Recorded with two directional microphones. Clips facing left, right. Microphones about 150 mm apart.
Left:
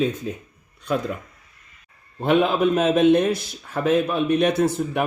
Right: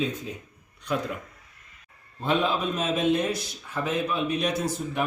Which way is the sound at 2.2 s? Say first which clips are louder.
Left 7 dB; 65° left (ahead or behind).